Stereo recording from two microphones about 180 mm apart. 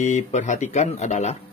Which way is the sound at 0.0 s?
40° left (ahead or behind).